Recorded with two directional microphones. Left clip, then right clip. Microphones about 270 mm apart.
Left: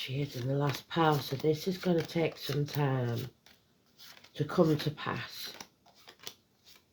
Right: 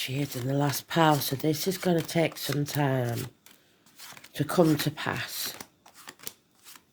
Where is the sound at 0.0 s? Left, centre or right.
Right.